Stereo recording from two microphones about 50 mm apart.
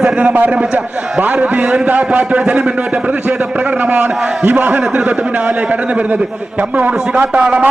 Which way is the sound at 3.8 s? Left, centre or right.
Right.